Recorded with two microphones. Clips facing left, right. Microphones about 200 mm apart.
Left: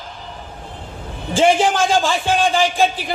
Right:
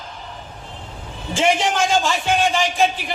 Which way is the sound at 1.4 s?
30° left (ahead or behind).